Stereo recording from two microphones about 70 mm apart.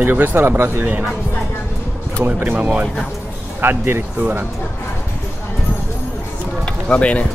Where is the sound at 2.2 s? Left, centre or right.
Right.